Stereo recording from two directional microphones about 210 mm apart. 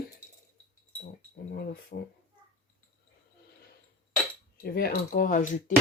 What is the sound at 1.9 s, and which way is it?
Speech, 45° left (ahead or behind).